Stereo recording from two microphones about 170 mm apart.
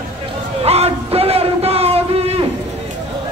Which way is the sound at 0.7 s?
35° right (ahead or behind).